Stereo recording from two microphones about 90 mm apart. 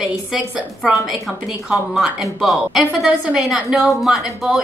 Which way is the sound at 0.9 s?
Centre (ahead or behind).